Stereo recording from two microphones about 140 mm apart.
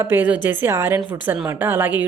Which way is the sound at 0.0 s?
15° right (ahead or behind).